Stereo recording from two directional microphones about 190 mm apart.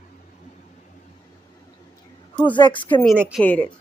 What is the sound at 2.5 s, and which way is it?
Speech, 25° left (ahead or behind).